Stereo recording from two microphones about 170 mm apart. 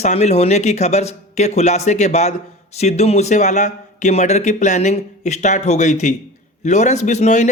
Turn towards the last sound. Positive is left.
turn(degrees=45)  # may be behind; listen again after turning